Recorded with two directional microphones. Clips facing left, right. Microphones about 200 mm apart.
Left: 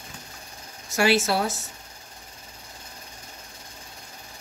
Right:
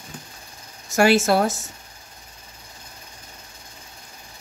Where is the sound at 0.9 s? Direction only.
45° right (ahead or behind).